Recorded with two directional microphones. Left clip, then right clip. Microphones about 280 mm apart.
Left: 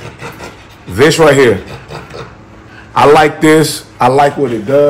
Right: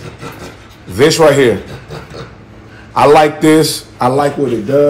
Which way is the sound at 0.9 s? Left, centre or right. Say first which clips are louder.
Left 1 dB; left.